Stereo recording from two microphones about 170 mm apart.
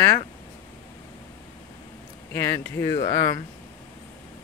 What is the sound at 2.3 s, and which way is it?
Speech, 15° left (ahead or behind).